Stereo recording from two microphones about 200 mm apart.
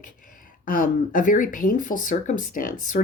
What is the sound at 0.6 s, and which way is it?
Speech, 45° left (ahead or behind).